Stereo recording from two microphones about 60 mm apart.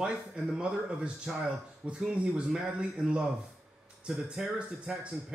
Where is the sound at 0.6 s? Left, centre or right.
Centre.